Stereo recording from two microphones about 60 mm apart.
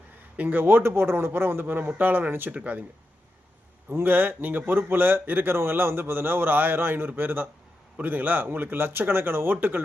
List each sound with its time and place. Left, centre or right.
0.3 s speech: right
3.8 s speech: right